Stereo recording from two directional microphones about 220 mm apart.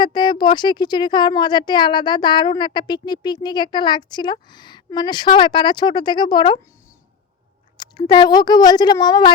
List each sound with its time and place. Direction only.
0.0 s speech: 20° left (ahead or behind)
7.8 s speech: 20° left (ahead or behind)